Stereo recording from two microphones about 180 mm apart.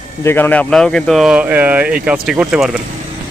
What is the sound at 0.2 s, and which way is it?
Speech, 10° left (ahead or behind).